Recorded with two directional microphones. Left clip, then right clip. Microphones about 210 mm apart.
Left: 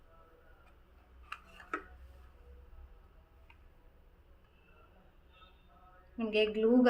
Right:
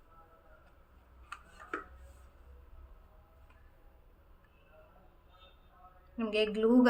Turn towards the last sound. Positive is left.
turn(degrees=-15)  # may be behind; listen again after turning